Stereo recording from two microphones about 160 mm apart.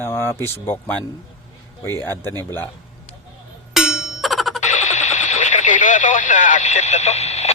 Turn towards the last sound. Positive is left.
turn(degrees=45)  # may be behind; listen again after turning